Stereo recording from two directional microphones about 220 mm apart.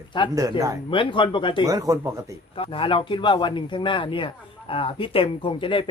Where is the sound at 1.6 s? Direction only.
15° right (ahead or behind).